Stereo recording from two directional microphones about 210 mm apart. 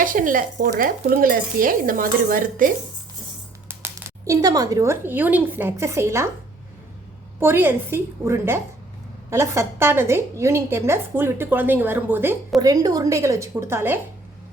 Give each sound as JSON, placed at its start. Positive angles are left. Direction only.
{"t": 0.0, "sound": "speech", "side_deg": -40}
{"t": 3.7, "sound": "speech", "side_deg": -15}
{"t": 7.3, "sound": "a woman's voice", "side_deg": -10}